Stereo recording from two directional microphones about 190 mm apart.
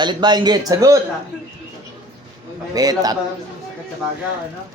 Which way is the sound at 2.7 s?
20° right (ahead or behind).